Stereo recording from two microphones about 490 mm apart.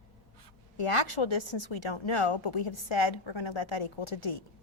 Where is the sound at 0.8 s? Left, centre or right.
Left.